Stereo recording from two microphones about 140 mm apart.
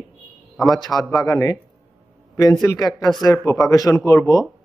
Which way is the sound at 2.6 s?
25° left (ahead or behind).